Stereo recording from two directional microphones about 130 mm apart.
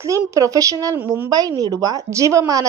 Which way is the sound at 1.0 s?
15° right (ahead or behind).